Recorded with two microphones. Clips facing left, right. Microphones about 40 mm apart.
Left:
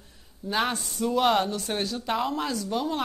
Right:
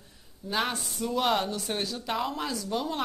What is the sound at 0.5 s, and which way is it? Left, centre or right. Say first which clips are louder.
Speech: left 3 dB; centre.